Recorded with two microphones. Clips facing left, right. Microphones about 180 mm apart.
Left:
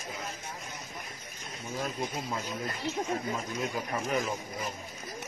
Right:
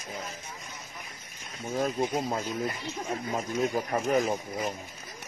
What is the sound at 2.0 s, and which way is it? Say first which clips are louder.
Speech: right 6 dB; 55° right (ahead or behind).